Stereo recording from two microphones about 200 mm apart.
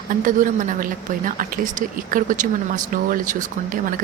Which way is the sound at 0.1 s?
40° right (ahead or behind).